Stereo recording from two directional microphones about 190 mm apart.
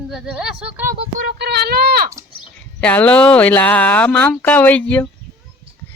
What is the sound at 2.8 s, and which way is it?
Speech, 5° left (ahead or behind).